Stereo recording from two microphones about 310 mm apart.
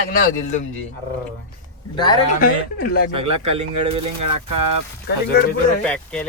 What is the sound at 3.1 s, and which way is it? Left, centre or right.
Speech, right.